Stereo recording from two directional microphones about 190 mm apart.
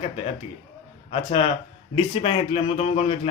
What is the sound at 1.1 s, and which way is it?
A man's voice, 30° left (ahead or behind).